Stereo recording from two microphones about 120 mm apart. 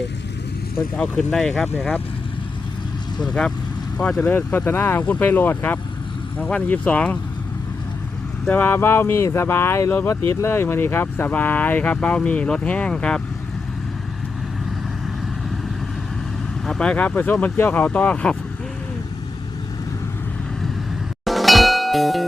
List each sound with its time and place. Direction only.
0.9 s speech: 10° left (ahead or behind)
3.9 s speech: 10° left (ahead or behind)
8.4 s speech: 15° left (ahead or behind)
16.6 s speech: 5° left (ahead or behind)
21.2 s music: centre (ahead or behind)